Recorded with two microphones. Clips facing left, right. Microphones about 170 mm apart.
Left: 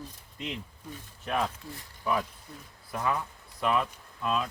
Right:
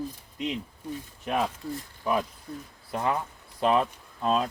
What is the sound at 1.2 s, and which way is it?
Speech, 15° right (ahead or behind).